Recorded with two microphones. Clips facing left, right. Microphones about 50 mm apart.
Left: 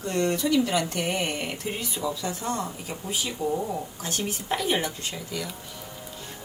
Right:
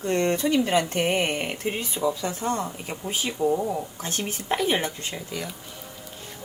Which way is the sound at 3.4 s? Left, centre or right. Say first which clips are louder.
Right 5 dB; centre.